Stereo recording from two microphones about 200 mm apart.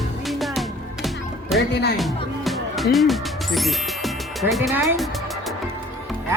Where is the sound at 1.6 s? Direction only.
55° left (ahead or behind).